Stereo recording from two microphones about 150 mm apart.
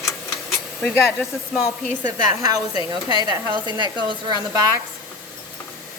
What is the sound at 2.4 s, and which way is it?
Speech, 25° right (ahead or behind).